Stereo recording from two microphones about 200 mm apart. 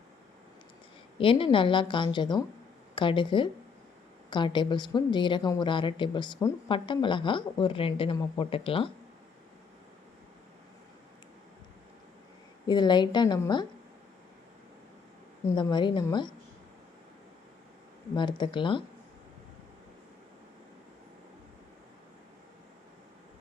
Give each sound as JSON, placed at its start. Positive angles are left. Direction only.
{"t": 1.2, "sound": "a woman's voice", "side_deg": 25}
{"t": 12.6, "sound": "a woman's voice", "side_deg": 20}
{"t": 15.4, "sound": "a woman's voice", "side_deg": 20}
{"t": 18.1, "sound": "a woman's voice", "side_deg": 25}